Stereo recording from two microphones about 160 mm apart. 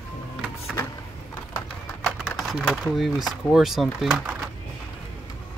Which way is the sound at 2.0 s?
Centre (ahead or behind).